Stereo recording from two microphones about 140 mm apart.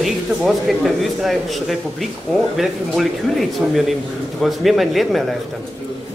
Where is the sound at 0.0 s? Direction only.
Centre (ahead or behind).